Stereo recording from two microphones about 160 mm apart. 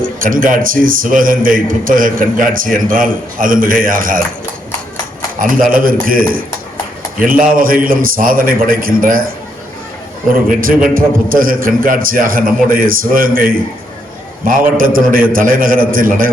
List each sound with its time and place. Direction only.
0.0 s a man's voice: 60° right (ahead or behind)
5.4 s a man's voice: 60° right (ahead or behind)
10.5 s a man's voice: 60° right (ahead or behind)
14.8 s a man's voice: 60° right (ahead or behind)